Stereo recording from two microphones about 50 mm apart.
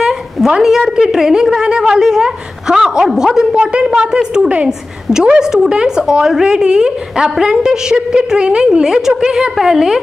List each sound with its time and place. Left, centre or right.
0.5 s a woman's voice: centre